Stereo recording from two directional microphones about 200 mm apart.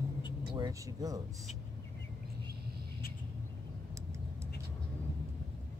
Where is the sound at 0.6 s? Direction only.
15° right (ahead or behind).